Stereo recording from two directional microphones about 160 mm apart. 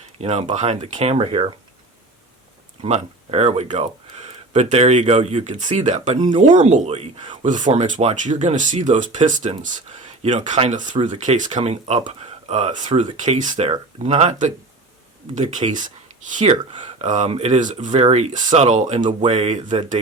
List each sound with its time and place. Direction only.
0.2 s speech: 40° right (ahead or behind)
1.1 s speech: 35° right (ahead or behind)
2.8 s speech: 40° right (ahead or behind)
6.1 s speech: 30° right (ahead or behind)
6.4 s speech: 45° right (ahead or behind)
12.9 s speech: 35° right (ahead or behind)
13.1 s speech: 50° right (ahead or behind)